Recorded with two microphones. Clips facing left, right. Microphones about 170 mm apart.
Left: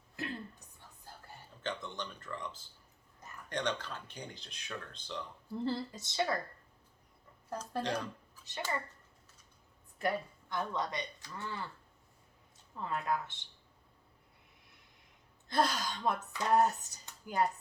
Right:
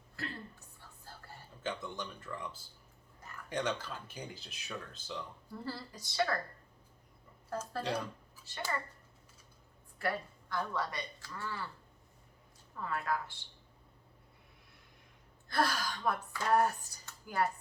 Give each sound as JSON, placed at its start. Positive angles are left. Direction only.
{"t": 0.2, "sound": "a sound", "side_deg": 15}
{"t": 1.6, "sound": "speech", "side_deg": -10}
{"t": 5.6, "sound": "speech", "side_deg": 25}
{"t": 7.8, "sound": "speech", "side_deg": -10}
{"t": 10.0, "sound": "speech", "side_deg": 20}
{"t": 12.7, "sound": "speech", "side_deg": 20}
{"t": 15.4, "sound": "speech", "side_deg": 20}